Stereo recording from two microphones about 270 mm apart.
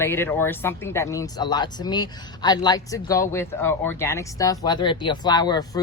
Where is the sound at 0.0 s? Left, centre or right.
Centre.